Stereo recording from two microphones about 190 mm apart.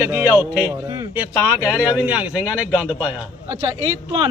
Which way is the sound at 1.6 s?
10° right (ahead or behind).